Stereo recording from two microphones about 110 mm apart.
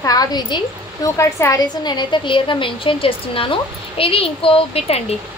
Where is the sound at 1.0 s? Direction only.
30° left (ahead or behind); by 5.0 s 60° left (ahead or behind).